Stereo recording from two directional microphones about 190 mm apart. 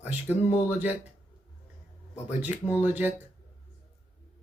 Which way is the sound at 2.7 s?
10° right (ahead or behind).